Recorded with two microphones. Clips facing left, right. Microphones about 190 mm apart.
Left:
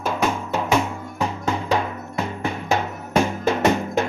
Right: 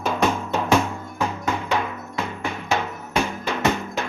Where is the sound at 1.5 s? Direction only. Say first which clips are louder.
Left 4 dB; 35° left (ahead or behind).